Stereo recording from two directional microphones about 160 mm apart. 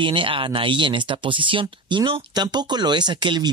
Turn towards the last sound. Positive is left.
turn(degrees=-30)  # may be behind; listen again after turning